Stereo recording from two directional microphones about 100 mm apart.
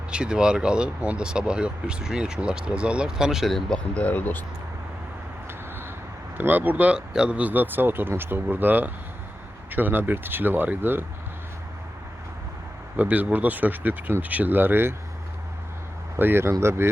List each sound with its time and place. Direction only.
0.1 s speech: 10° right (ahead or behind)
3.9 s speech: 15° left (ahead or behind)
6.3 s speech: 20° right (ahead or behind)
13.0 s speech: 15° right (ahead or behind)
16.1 s speech: 20° right (ahead or behind)